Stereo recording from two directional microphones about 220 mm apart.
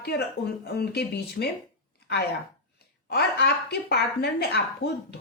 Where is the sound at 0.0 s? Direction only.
50° left (ahead or behind).